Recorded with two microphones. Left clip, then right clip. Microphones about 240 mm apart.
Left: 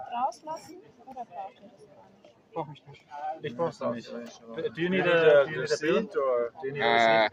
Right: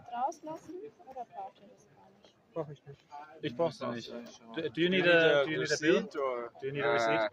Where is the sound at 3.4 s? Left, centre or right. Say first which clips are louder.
Left 1 dB; right.